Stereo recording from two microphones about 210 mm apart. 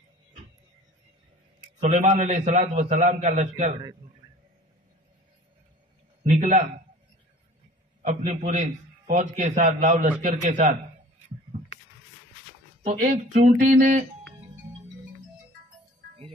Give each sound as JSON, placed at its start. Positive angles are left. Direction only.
{"t": 1.8, "sound": "a man's voice", "side_deg": -30}
{"t": 6.2, "sound": "a man's voice", "side_deg": -35}
{"t": 8.0, "sound": "a man's voice", "side_deg": -35}
{"t": 12.8, "sound": "a man's voice", "side_deg": -40}